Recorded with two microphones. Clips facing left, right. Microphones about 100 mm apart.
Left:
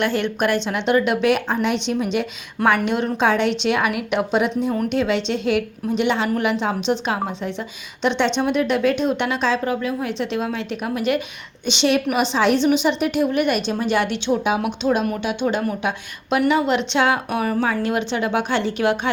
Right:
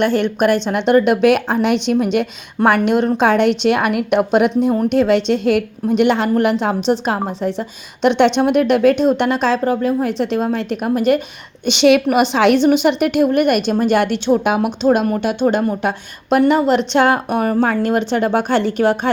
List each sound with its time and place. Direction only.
0.0 s a woman's voice: 40° right (ahead or behind)
11.6 s speech: 60° right (ahead or behind)
12.5 s a woman's voice: 50° right (ahead or behind)